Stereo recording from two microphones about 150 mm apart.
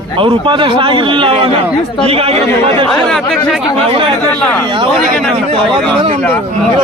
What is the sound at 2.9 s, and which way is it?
Speech, 5° left (ahead or behind).